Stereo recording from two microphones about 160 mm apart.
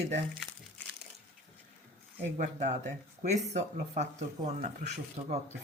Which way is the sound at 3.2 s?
45° right (ahead or behind).